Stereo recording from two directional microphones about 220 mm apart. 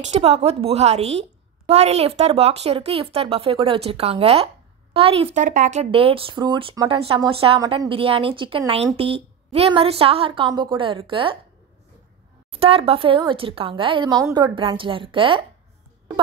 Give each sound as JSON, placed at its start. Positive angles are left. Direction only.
{"t": 0.0, "sound": "speech", "side_deg": -30}
{"t": 12.5, "sound": "speech", "side_deg": -25}